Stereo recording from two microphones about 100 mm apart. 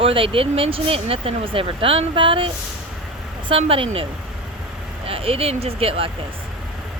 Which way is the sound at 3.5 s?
70° right (ahead or behind).